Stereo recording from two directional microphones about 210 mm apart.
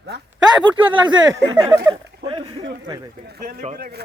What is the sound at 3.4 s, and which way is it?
Speech, 45° right (ahead or behind).